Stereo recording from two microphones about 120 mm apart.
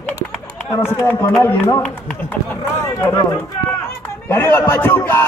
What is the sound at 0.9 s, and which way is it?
Speech, 20° left (ahead or behind).